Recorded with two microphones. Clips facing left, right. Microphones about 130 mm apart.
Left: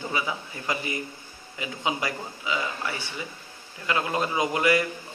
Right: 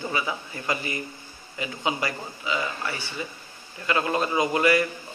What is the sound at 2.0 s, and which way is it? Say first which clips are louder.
A man's voice: right 1 dB; 10° left (ahead or behind).